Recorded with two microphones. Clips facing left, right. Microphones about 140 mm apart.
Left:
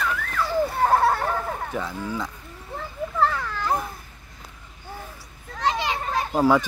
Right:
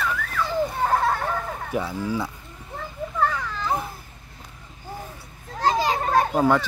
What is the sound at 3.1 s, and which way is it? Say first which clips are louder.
Children playing: left 1 dB; 5° left (ahead or behind).